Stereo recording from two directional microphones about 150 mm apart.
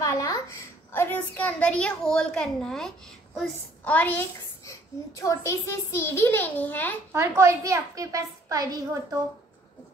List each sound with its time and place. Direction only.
0.0 s a child's voice: 20° left (ahead or behind)
7.1 s a woman's voice: 20° right (ahead or behind)